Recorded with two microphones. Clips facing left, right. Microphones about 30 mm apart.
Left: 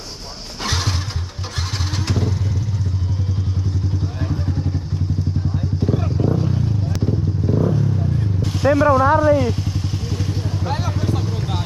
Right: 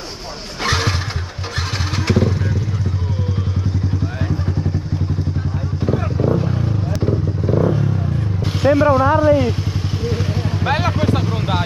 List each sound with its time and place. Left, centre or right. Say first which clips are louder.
0.7 s vehicle: right 5 dB; right
2.0 s motorcycle: right 7 dB; right
5.8 s vehicle: right 2 dB; right
8.4 s motorcycle: right 2 dB; right
10.6 s vehicle: right 8 dB; right
11.1 s vehicle: right 5 dB; right